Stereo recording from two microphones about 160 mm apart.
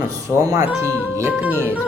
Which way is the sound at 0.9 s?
10° left (ahead or behind).